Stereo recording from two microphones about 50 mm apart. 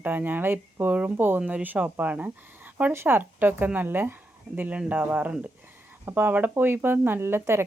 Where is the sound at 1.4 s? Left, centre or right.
Right.